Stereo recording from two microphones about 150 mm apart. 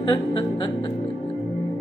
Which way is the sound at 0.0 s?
35° left (ahead or behind).